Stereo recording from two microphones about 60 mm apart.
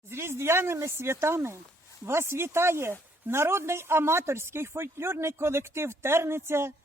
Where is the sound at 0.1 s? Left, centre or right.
Right.